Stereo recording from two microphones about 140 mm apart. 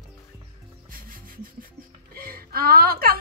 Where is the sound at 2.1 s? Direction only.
90° right.